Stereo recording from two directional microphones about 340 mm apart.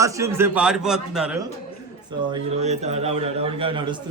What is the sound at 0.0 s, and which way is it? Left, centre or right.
A man's voice, centre.